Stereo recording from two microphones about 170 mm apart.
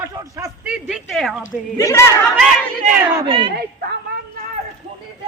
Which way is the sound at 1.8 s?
15° left (ahead or behind).